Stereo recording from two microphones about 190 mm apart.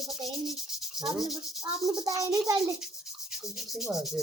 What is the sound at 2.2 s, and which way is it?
Rub, 15° right (ahead or behind).